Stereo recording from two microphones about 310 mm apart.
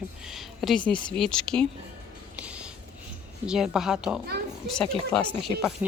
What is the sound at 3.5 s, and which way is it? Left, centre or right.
Speech, centre.